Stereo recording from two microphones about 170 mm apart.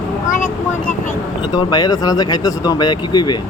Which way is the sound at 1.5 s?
25° left (ahead or behind).